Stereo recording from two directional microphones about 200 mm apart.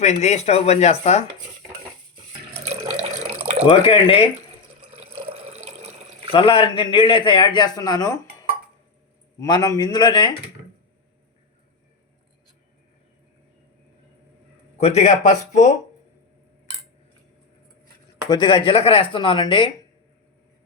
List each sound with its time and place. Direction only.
0.0 s speech: 35° left (ahead or behind)
3.7 s speech: 25° left (ahead or behind)
4.9 s water: 30° right (ahead or behind)
6.3 s speech: 30° left (ahead or behind)
14.8 s speech: 35° left (ahead or behind)
18.3 s speech: 20° left (ahead or behind)